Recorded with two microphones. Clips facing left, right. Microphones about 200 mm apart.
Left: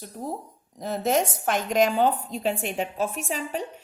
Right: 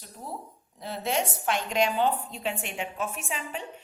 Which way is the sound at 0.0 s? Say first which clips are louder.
Left 6 dB; 40° left (ahead or behind).